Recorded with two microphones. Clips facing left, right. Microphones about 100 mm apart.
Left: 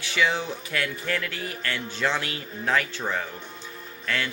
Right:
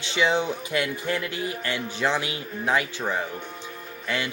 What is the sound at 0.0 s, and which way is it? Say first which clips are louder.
Speech: right 2 dB; 20° right (ahead or behind).